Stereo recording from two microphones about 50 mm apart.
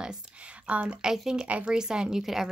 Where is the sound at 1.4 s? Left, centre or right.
Right.